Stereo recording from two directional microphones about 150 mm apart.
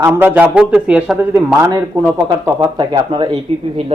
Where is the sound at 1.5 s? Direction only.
15° right (ahead or behind).